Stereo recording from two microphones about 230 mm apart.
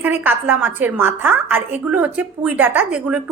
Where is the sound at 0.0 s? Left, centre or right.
Centre.